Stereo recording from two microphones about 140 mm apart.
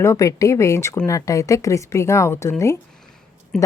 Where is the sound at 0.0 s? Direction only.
20° left (ahead or behind).